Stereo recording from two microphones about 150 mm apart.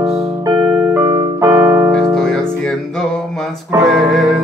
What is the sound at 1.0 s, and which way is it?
Keyboard, 20° right (ahead or behind).